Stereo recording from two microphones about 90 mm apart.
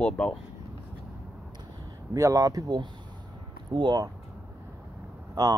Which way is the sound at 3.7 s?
55° right (ahead or behind).